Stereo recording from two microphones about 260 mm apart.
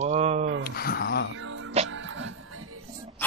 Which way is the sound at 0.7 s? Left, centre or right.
Left.